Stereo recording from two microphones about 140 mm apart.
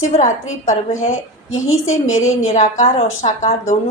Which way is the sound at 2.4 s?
60° left (ahead or behind).